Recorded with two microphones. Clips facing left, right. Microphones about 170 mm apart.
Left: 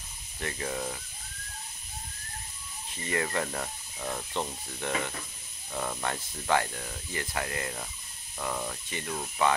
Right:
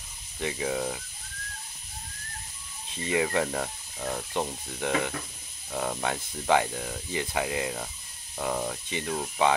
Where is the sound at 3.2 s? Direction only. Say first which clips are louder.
Right 4 dB; 5° right (ahead or behind).